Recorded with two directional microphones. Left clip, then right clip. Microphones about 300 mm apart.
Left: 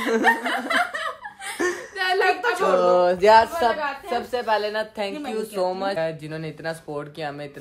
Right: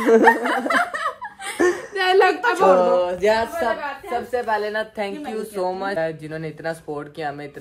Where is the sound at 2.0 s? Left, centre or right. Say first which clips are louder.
Right 6 dB; centre.